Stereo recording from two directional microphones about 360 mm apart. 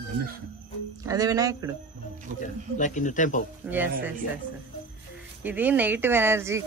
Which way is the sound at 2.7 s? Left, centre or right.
Left.